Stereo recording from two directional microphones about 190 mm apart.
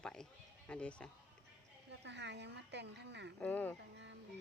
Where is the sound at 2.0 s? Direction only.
65° right (ahead or behind).